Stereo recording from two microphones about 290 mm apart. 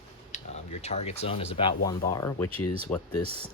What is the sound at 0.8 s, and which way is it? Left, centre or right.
Speech, left.